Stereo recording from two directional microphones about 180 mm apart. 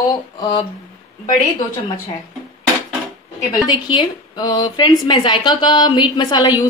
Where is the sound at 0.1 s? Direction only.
25° left (ahead or behind).